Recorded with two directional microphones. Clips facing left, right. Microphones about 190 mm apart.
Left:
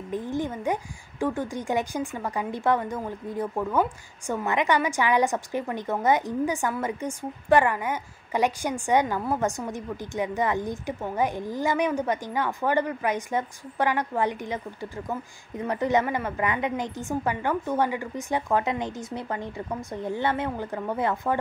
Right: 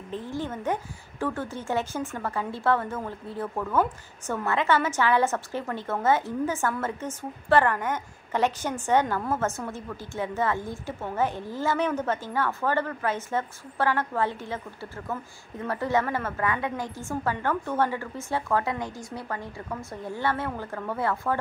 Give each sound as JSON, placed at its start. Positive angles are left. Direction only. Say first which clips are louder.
{"t": 0.1, "sound": "speech", "louder": "left 3 dB", "side_deg": 15}